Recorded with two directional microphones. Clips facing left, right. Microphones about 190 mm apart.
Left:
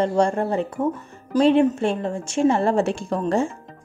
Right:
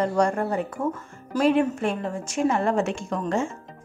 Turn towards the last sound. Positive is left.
turn(degrees=35)  # may be behind; listen again after turning